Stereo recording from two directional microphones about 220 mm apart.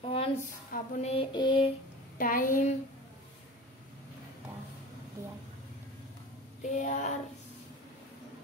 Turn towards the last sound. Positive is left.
turn(degrees=35)  # may be behind; listen again after turning